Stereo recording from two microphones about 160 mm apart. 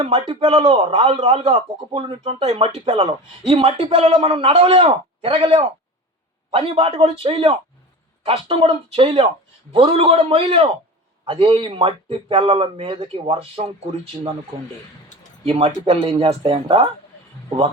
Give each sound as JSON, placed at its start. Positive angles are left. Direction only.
{"t": 0.0, "sound": "speech", "side_deg": -35}
{"t": 15.4, "sound": "speech", "side_deg": -35}